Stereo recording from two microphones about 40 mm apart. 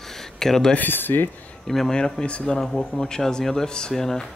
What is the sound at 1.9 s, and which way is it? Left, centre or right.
Speech, centre.